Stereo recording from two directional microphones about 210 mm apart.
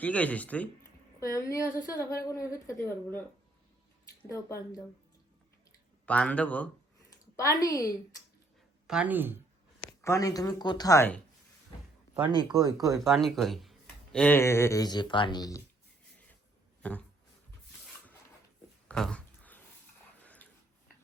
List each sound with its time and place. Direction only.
0.0 s a woman's voice: 5° left (ahead or behind)
6.1 s a woman's voice: 5° left (ahead or behind)
8.9 s speech: 5° right (ahead or behind)
10.0 s a woman's voice: 15° left (ahead or behind)
12.4 s speech: 20° right (ahead or behind)
13.1 s a woman's voice: centre (ahead or behind); by 15.6 s 15° left (ahead or behind)
16.8 s a sound: 5° left (ahead or behind)
18.9 s a sound: 5° left (ahead or behind)